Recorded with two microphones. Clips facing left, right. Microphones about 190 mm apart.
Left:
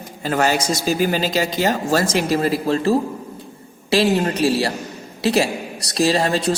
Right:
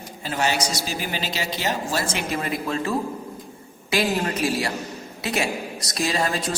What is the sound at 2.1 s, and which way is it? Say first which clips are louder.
A man's voice: left 8 dB; 35° left (ahead or behind).